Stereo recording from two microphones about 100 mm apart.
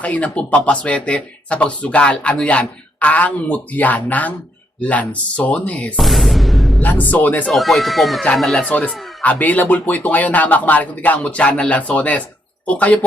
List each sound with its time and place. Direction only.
0.0 s speech: 15° left (ahead or behind)
6.0 s speech: centre (ahead or behind)
6.8 s speech: 15° left (ahead or behind)
7.5 s speech: centre (ahead or behind)